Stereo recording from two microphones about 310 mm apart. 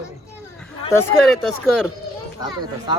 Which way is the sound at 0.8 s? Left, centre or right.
Centre.